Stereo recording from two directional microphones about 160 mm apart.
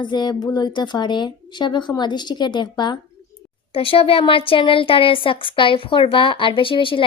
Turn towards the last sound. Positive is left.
turn(degrees=30)  # may be behind; listen again after turning